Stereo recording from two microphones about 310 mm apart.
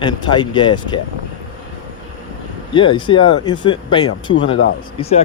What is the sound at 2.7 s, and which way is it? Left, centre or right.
Speech, centre.